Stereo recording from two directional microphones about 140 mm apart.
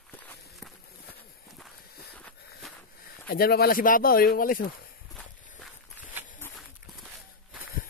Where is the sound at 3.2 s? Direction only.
90° left.